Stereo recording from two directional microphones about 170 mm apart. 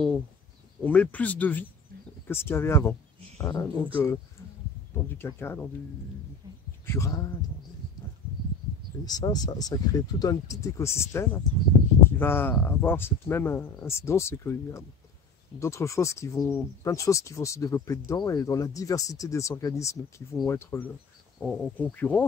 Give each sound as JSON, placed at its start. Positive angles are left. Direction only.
{"t": 0.8, "sound": "speech", "side_deg": 10}
{"t": 6.9, "sound": "speech", "side_deg": 20}
{"t": 9.0, "sound": "speech", "side_deg": 25}